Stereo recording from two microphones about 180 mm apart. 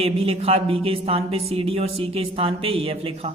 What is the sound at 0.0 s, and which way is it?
A man's voice, 35° right (ahead or behind).